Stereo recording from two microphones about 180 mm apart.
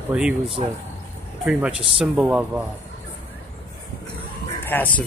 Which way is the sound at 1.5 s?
5° right (ahead or behind).